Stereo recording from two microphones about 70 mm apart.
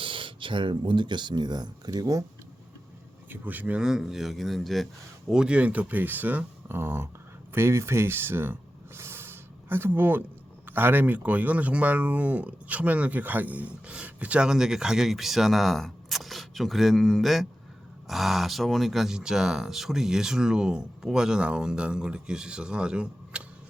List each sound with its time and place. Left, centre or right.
0.9 s speech: right
3.2 s speech: right
3.8 s speech: centre
5.3 s speech: centre; by 8.5 s right
9.0 s a sound: right
10.7 s speech: right; by 23.4 s centre